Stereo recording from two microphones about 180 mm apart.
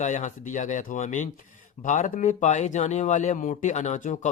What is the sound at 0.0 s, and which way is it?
Speech, 40° left (ahead or behind).